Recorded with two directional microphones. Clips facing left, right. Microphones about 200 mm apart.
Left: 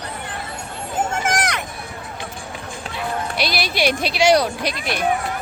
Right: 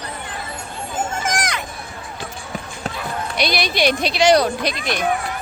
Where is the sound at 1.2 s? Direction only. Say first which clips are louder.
Left 2 dB; 65° left (ahead or behind).